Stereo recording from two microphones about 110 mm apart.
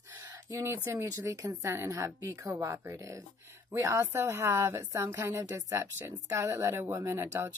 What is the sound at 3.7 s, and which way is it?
A woman's voice, 20° right (ahead or behind).